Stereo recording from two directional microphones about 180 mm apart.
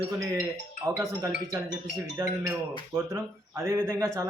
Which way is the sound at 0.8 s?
15° right (ahead or behind).